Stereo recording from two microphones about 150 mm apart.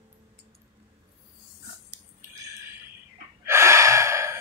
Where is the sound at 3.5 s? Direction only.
20° right (ahead or behind).